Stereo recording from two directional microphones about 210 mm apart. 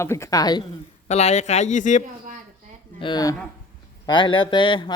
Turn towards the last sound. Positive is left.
turn(degrees=20)  # may be behind; listen again after turning